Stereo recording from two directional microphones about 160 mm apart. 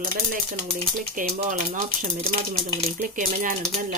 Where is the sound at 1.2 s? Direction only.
60° right (ahead or behind).